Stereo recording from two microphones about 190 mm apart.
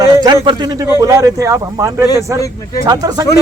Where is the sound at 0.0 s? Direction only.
20° right (ahead or behind).